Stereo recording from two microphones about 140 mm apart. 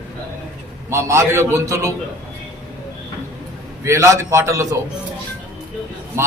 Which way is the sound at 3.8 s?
20° right (ahead or behind).